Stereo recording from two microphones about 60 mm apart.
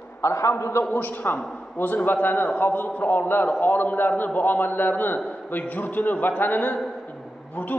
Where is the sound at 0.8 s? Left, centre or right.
Left.